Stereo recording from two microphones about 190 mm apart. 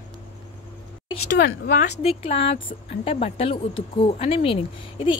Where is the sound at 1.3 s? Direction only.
75° left (ahead or behind).